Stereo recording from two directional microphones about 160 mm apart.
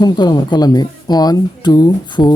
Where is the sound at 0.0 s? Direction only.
25° left (ahead or behind).